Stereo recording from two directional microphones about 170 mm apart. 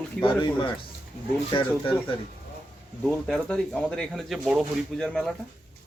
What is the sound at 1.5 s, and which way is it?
Speech, 30° left (ahead or behind).